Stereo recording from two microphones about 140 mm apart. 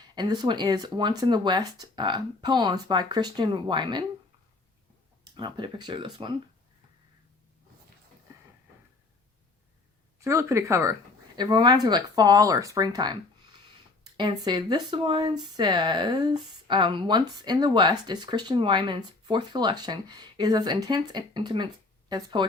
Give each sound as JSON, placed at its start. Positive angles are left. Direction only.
{"t": 0.2, "sound": "speech", "side_deg": -30}
{"t": 5.3, "sound": "speech", "side_deg": -35}
{"t": 10.2, "sound": "speech", "side_deg": -20}
{"t": 11.3, "sound": "speech", "side_deg": -30}